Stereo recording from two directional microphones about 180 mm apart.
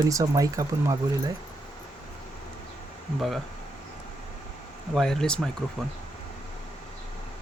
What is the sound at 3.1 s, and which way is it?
Speech, centre (ahead or behind).